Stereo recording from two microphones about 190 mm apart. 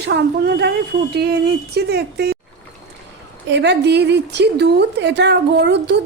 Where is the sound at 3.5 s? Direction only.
65° right (ahead or behind).